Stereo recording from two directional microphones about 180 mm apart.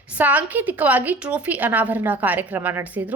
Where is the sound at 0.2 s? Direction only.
10° right (ahead or behind).